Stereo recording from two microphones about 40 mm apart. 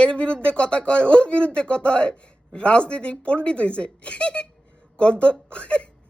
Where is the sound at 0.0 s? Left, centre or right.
Left.